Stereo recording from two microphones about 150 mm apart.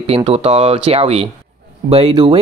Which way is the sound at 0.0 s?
40° right (ahead or behind).